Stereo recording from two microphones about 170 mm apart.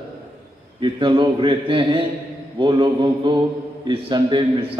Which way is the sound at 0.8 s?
30° right (ahead or behind).